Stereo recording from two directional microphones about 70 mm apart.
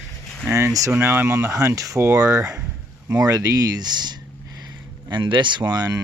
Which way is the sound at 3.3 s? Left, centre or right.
Right.